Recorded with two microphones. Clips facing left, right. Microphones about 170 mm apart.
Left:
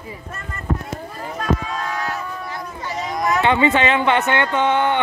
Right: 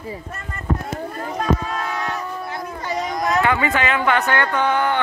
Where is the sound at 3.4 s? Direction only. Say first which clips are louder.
Left 4 dB; 25° left (ahead or behind).